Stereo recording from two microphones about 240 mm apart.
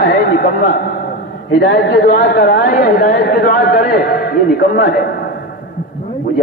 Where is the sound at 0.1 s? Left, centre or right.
Left.